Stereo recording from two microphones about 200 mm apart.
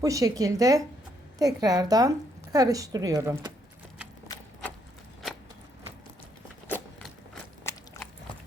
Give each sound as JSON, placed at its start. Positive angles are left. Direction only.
{"t": 0.0, "sound": "a woman's voice", "side_deg": -15}
{"t": 6.7, "sound": "a sound", "side_deg": 5}
{"t": 7.6, "sound": "biting", "side_deg": 10}